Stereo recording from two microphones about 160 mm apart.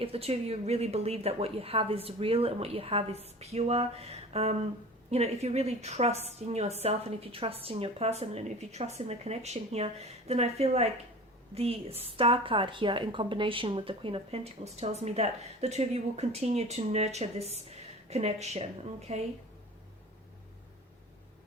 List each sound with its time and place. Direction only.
0.0 s a woman's voice: 40° right (ahead or behind)